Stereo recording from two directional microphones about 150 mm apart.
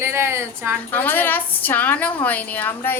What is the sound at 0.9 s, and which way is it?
A woman's voice, 10° left (ahead or behind).